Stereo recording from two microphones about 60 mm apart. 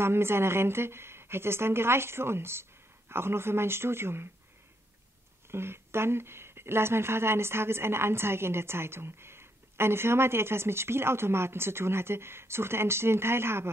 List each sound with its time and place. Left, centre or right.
0.0 s a woman's voice: right
5.5 s a woman's voice: right